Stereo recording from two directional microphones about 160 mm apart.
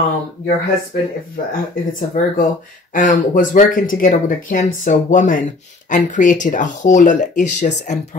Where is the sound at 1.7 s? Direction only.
60° left (ahead or behind).